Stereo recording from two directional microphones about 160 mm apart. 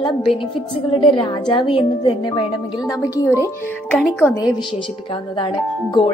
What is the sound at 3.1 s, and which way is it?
A woman's voice, 20° left (ahead or behind).